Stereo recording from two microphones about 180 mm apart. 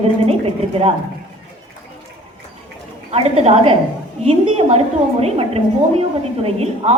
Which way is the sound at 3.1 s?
35° right (ahead or behind).